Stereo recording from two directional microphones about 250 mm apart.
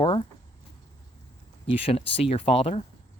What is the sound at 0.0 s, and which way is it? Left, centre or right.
Speech, centre.